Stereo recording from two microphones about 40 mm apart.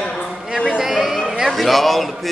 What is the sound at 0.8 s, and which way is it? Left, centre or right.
A man's voice, centre.